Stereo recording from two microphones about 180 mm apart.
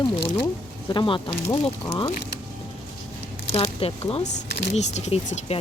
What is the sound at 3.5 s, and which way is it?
Speech, 35° left (ahead or behind).